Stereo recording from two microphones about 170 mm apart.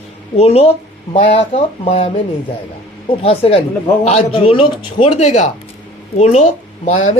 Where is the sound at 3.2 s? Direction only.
35° left (ahead or behind).